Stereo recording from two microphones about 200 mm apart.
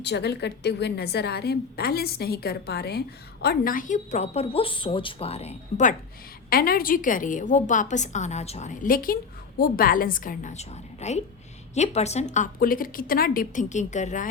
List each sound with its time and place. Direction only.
0.0 s a woman's voice: 55° left (ahead or behind); by 5.9 s 35° left (ahead or behind)
6.5 s a woman's voice: 50° left (ahead or behind)